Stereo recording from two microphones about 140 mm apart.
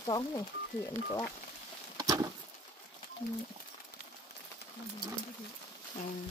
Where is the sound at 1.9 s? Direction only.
25° right (ahead or behind).